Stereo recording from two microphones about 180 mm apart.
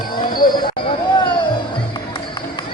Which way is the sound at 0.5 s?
25° left (ahead or behind).